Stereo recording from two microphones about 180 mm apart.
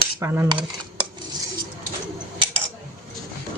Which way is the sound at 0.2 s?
10° right (ahead or behind).